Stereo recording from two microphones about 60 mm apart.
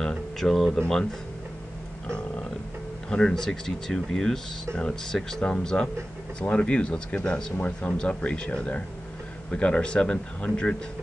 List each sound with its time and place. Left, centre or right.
0.0 s a sound: centre
0.7 s speech: centre
2.0 s speech: centre
5.4 s speech: centre